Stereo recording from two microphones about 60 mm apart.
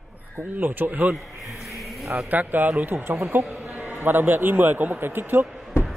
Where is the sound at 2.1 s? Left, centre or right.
Right.